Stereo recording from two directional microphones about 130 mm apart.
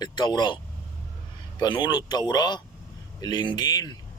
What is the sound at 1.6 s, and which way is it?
Speech, 35° left (ahead or behind).